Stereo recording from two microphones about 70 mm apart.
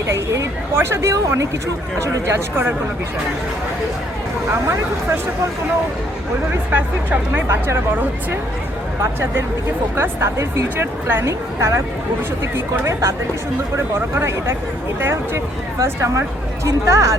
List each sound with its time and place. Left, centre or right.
0.8 s a woman's voice: right
4.6 s speech: right
6.7 s speech: right
7.4 s a woman's voice: right
9.9 s a woman's voice: right
12.8 s a woman's voice: right
15.8 s speech: right